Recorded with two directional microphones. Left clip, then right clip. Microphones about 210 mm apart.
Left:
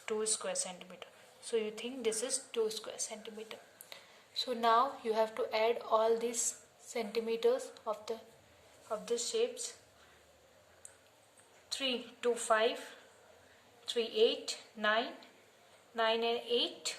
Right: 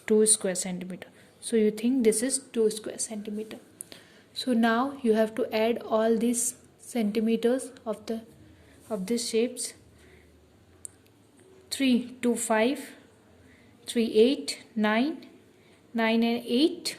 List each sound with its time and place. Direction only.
0.1 s a woman's voice: 40° right (ahead or behind)
8.9 s a woman's voice: 40° right (ahead or behind)
11.9 s a woman's voice: 40° right (ahead or behind)
13.9 s a woman's voice: 45° right (ahead or behind)